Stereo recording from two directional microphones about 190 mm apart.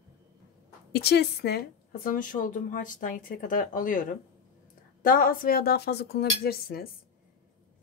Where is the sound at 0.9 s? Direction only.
60° left (ahead or behind).